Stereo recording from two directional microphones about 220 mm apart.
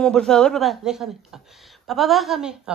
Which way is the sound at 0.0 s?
5° left (ahead or behind).